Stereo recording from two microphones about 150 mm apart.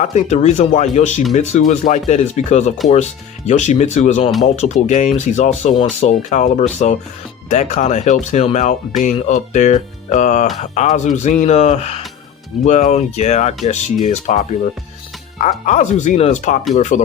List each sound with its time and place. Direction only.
0.0 s speech: 50° left (ahead or behind)